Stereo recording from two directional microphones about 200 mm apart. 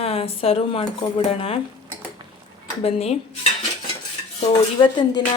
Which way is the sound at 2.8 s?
30° left (ahead or behind).